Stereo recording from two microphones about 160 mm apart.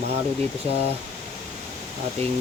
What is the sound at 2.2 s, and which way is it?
Speech, 45° right (ahead or behind).